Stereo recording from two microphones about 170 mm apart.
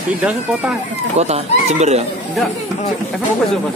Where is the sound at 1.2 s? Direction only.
40° right (ahead or behind).